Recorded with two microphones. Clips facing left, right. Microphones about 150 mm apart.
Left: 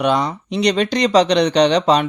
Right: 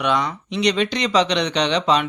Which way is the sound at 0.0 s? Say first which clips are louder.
Left 4 dB; 35° left (ahead or behind).